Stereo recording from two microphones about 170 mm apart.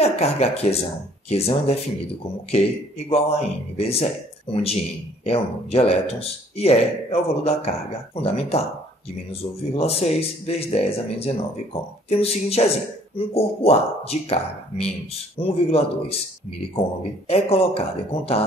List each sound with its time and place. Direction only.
0.0 s speech: 40° left (ahead or behind)
3.1 s speech: 35° left (ahead or behind)
17.3 s speech: 35° left (ahead or behind)